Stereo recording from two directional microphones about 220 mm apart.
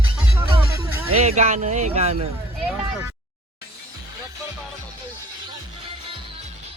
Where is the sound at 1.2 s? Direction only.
30° right (ahead or behind).